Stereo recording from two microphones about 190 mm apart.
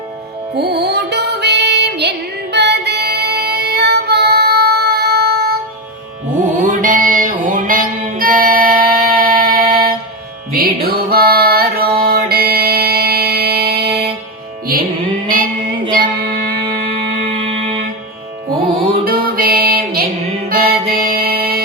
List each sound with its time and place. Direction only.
0.5 s music: 60° right (ahead or behind)
6.3 s music: 40° right (ahead or behind)
16.6 s music: 30° right (ahead or behind)
18.5 s music: 50° right (ahead or behind)